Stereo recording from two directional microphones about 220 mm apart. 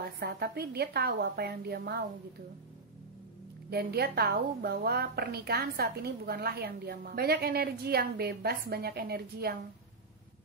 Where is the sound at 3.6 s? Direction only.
45° right (ahead or behind).